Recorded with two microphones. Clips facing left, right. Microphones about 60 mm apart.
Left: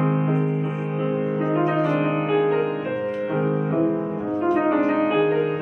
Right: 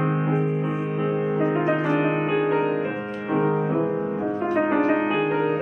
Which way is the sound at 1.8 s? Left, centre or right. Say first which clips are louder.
Left 1 dB; right.